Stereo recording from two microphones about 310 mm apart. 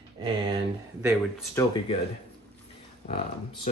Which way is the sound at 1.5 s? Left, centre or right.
Centre.